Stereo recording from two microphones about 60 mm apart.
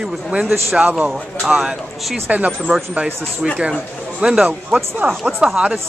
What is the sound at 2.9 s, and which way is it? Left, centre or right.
A man's voice, centre.